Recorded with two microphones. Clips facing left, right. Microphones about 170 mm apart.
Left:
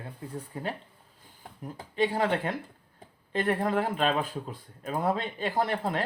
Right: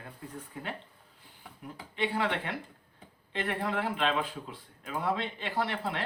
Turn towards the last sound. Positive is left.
turn(degrees=45)  # may be behind; listen again after turning